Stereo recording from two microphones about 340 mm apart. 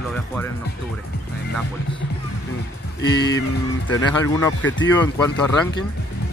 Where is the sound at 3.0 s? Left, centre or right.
Left.